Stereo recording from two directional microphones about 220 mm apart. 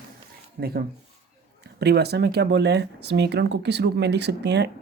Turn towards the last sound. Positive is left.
turn(degrees=-50)  # may be behind; listen again after turning